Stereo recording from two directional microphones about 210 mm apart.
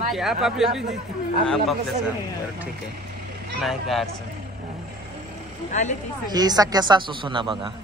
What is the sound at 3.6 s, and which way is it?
Speech, centre (ahead or behind).